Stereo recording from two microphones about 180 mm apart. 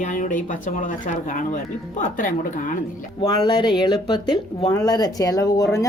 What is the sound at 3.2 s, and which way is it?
Speech, 25° left (ahead or behind).